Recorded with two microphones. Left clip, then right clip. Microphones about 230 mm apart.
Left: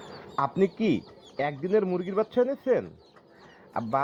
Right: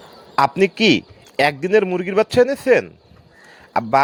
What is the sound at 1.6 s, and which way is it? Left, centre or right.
Speech, right.